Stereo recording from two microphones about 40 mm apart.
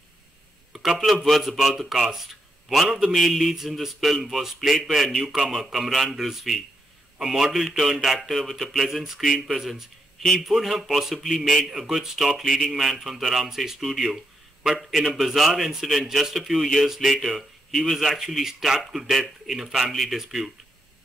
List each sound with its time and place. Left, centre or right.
0.7 s a sound: centre
1.2 s speech: centre
11.3 s speech: centre
11.7 s speech: centre